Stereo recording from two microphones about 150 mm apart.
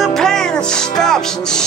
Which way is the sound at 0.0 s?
5° left (ahead or behind).